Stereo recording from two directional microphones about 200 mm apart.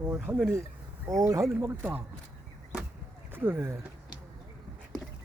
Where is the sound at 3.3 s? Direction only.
10° right (ahead or behind).